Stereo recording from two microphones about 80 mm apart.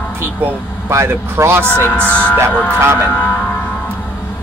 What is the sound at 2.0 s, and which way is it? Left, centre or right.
Speech, centre.